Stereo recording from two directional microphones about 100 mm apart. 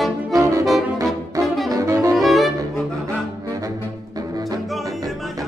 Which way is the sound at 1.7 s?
35° right (ahead or behind).